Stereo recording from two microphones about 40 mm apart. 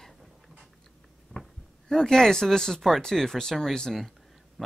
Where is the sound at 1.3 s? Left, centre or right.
Centre.